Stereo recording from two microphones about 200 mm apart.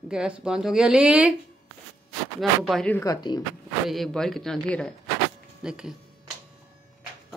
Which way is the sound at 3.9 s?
Centre (ahead or behind).